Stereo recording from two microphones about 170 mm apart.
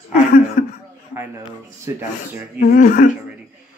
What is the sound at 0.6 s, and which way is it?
Speech, 50° left (ahead or behind).